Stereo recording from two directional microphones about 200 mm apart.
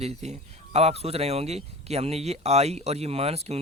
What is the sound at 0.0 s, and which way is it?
Speech, 35° right (ahead or behind).